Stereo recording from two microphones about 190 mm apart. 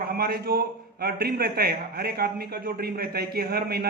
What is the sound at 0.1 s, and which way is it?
A man's voice, 55° right (ahead or behind).